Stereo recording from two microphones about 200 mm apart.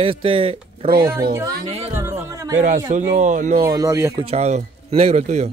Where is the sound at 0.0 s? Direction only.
25° right (ahead or behind).